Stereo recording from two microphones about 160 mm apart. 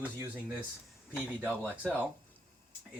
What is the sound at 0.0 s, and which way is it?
Speech, 15° right (ahead or behind).